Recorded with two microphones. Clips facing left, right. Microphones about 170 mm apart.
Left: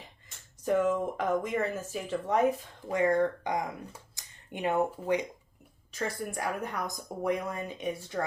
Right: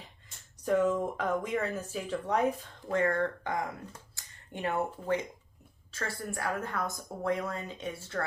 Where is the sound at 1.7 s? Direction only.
5° left (ahead or behind).